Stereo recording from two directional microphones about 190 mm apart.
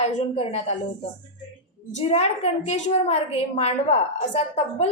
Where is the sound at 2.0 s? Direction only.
30° left (ahead or behind).